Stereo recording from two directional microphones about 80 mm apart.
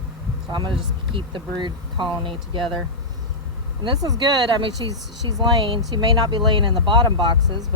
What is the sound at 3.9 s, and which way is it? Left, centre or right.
Speech, right.